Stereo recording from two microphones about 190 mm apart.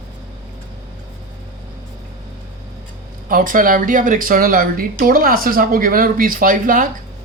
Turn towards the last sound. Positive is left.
turn(degrees=-45)  # may be behind; listen again after turning